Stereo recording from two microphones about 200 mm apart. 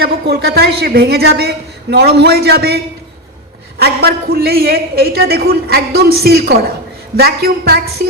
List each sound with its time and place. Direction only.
0.0 s a man's voice: 55° right (ahead or behind)